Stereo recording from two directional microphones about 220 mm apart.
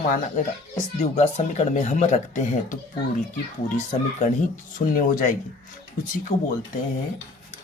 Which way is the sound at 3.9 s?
35° left (ahead or behind).